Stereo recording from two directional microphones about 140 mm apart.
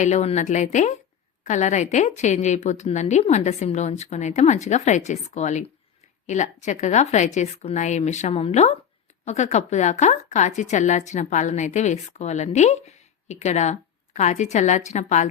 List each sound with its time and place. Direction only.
0.0 s a woman's voice: 55° left (ahead or behind)